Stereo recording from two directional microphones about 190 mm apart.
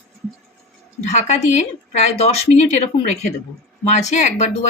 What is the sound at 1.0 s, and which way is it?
Speech, 40° left (ahead or behind).